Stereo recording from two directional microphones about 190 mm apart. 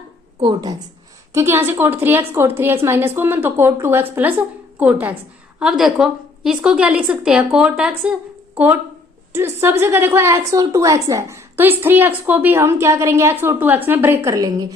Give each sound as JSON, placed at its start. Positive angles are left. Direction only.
{"t": 0.4, "sound": "a woman's voice", "side_deg": -20}